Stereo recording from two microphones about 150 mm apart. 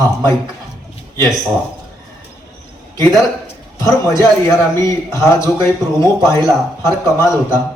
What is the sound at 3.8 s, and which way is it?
A man's voice, 20° left (ahead or behind).